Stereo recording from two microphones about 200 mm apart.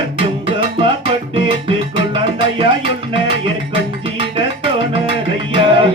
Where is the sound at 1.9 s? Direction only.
25° right (ahead or behind).